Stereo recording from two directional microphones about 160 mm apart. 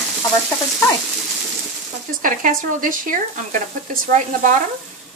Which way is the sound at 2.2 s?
55° right (ahead or behind).